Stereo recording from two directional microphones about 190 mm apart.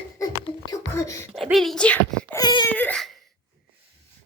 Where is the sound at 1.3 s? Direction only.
Centre (ahead or behind).